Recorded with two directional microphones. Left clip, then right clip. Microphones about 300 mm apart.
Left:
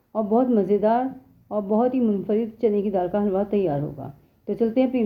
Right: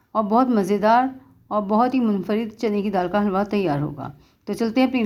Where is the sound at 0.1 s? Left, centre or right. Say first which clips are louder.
Right 2 dB; centre.